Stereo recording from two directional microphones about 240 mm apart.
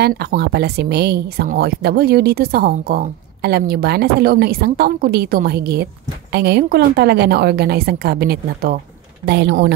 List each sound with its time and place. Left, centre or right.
0.0 s speech: right